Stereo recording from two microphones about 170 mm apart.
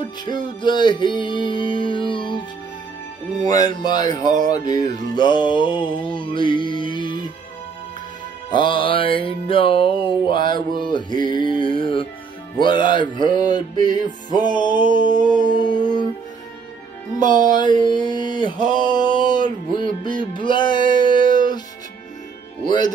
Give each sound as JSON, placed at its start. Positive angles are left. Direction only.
{"t": 0.0, "sound": "music", "side_deg": 25}
{"t": 3.5, "sound": "music", "side_deg": 25}
{"t": 8.5, "sound": "music", "side_deg": 30}
{"t": 17.2, "sound": "music", "side_deg": -50}
{"t": 17.6, "sound": "music", "side_deg": 25}
{"t": 22.7, "sound": "music", "side_deg": 25}